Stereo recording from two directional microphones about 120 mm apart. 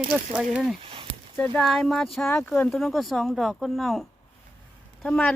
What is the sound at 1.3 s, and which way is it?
Speech, 15° left (ahead or behind).